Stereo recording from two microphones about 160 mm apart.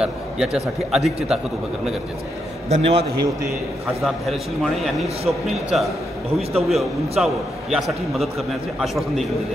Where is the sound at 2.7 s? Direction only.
40° right (ahead or behind).